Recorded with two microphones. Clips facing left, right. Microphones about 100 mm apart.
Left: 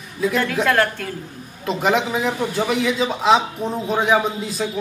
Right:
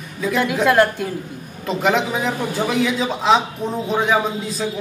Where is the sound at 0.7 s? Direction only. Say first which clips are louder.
Right 6 dB; 15° right (ahead or behind).